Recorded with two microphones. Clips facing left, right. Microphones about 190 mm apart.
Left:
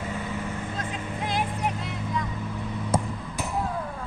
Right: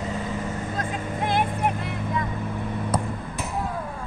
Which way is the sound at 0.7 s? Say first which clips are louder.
Right 4 dB; 50° right (ahead or behind).